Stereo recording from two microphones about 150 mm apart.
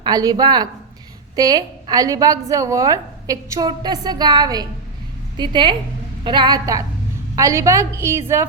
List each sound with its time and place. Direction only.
0.0 s a woman's voice: 25° right (ahead or behind)